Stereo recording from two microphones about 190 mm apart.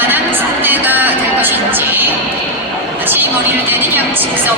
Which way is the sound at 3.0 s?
10° right (ahead or behind).